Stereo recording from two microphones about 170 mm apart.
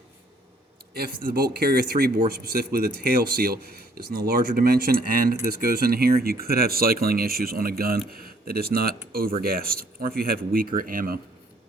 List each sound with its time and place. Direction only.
0.9 s speech: 60° right (ahead or behind)